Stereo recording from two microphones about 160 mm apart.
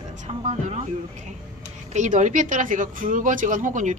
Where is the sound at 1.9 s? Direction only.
50° right (ahead or behind).